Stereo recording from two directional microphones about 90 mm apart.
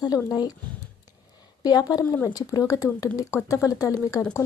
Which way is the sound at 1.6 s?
45° left (ahead or behind).